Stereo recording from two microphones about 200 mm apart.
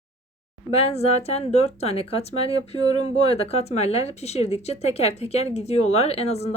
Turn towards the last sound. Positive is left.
turn(degrees=30)  # may be behind; listen again after turning